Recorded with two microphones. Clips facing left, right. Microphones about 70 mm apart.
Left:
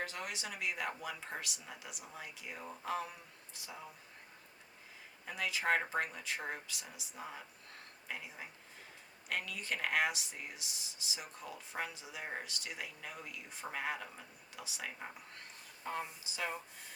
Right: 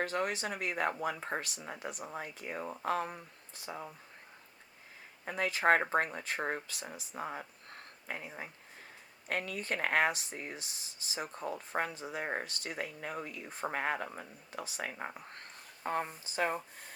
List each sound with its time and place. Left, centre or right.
0.0 s speech: right
5.2 s speech: right